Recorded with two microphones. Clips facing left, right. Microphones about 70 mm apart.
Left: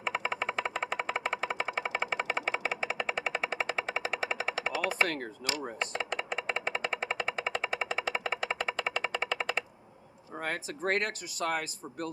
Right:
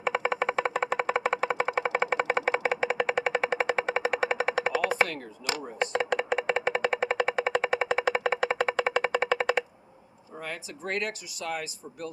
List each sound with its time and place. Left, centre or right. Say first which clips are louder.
0.2 s music: right 6 dB; right
5.8 s a sound: right 12 dB; right
10.3 s speech: left 2 dB; left